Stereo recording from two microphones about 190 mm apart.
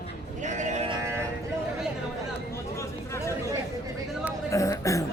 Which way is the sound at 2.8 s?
15° left (ahead or behind).